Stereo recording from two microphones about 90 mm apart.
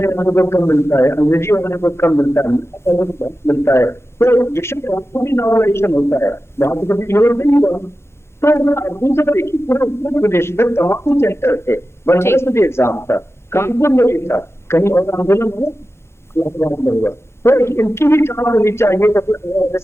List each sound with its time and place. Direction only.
0.0 s speech: 30° left (ahead or behind)